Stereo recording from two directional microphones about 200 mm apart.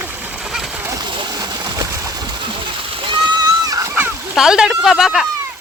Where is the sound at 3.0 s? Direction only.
25° right (ahead or behind); by 5.2 s centre (ahead or behind).